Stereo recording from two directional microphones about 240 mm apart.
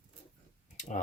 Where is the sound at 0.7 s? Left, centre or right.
Left.